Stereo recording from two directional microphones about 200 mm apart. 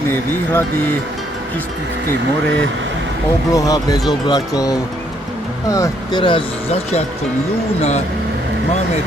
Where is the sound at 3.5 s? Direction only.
15° left (ahead or behind); by 8.0 s 35° left (ahead or behind).